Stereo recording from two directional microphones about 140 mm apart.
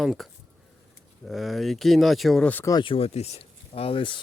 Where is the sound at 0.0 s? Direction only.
Centre (ahead or behind).